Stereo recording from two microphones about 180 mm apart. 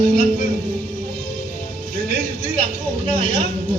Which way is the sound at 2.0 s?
45° left (ahead or behind).